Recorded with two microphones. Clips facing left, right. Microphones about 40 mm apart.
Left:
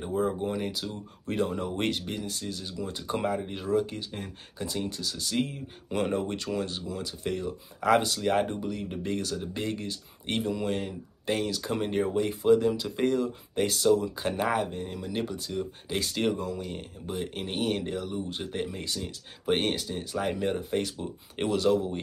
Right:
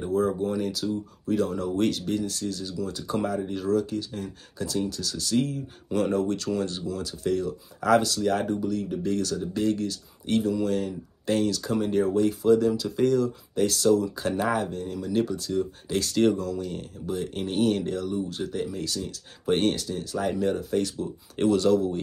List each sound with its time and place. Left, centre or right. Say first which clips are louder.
0.0 s a sound: right 4 dB; centre
0.4 s speech: right 4 dB; left
1.2 s speech: right 3 dB; left
1.5 s speech: right 4 dB; left
11.6 s speech: right 4 dB; left
13.7 s speech: right 1 dB; centre